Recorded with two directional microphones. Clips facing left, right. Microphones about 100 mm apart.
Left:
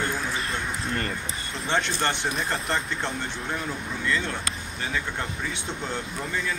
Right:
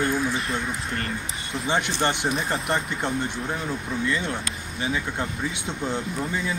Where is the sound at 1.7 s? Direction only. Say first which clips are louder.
Right 2 dB; 10° right (ahead or behind).